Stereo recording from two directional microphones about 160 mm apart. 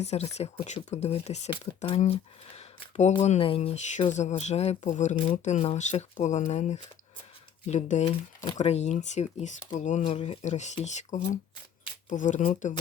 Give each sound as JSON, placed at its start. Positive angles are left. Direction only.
{"t": 0.0, "sound": "speech", "side_deg": 45}
{"t": 5.1, "sound": "speech", "side_deg": 35}
{"t": 10.0, "sound": "speech", "side_deg": 35}